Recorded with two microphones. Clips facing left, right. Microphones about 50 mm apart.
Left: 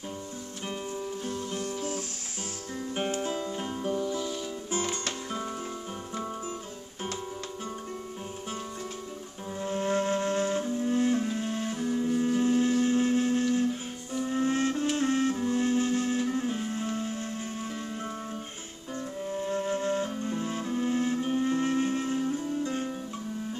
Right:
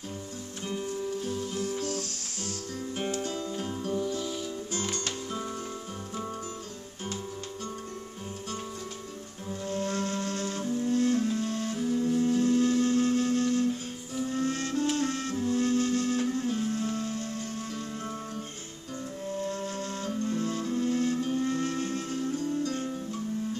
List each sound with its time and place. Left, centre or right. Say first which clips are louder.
1.2 s music: right 1 dB; centre
1.8 s guitar: right 1 dB; centre
2.9 s music: left 2 dB; left
4.0 s music: left 1 dB; centre
4.6 s music: left 6 dB; left
9.5 s flute: left 3 dB; left
19.4 s flute: left 8 dB; left